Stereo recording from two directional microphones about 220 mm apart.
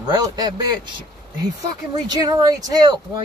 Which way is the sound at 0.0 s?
20° right (ahead or behind).